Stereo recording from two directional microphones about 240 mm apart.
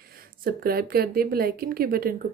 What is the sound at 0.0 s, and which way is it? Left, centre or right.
Speech, right.